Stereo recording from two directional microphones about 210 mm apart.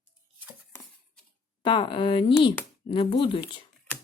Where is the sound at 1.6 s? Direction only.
25° left (ahead or behind).